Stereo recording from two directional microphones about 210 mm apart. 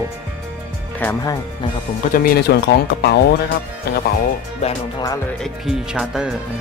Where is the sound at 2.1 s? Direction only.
50° left (ahead or behind).